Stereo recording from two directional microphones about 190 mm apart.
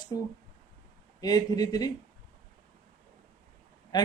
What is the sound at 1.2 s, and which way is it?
Speech, 20° left (ahead or behind).